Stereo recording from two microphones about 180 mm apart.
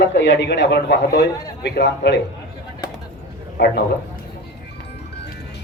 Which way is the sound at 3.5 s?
60° left (ahead or behind).